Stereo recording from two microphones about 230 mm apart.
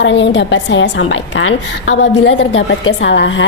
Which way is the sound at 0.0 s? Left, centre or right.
Left.